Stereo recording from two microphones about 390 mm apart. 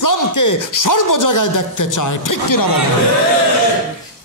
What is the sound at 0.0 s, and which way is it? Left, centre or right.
Speech, left.